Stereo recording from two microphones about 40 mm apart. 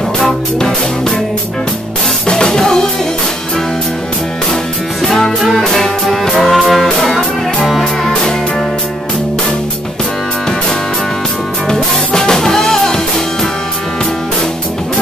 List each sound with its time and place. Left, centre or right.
0.2 s music: centre
2.2 s music: centre
5.0 s music: centre
7.8 s music: centre
11.7 s music: centre